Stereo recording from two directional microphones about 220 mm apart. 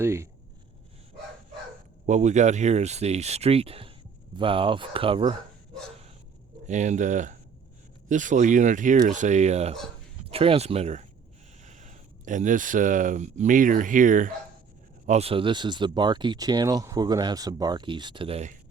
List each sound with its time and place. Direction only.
0.0 s speech: 10° right (ahead or behind)
2.0 s speech: 35° right (ahead or behind)
6.7 s speech: 35° right (ahead or behind)